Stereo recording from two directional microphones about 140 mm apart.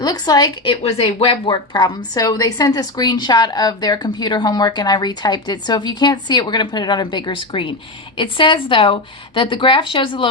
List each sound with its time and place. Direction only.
0.0 s speech: 30° left (ahead or behind)